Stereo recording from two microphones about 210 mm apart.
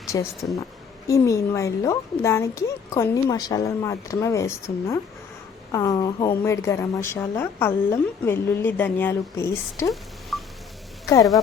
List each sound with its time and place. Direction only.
0.1 s a woman's voice: 15° left (ahead or behind)
9.9 s telephone dialing: centre (ahead or behind)
11.0 s speech: 15° left (ahead or behind)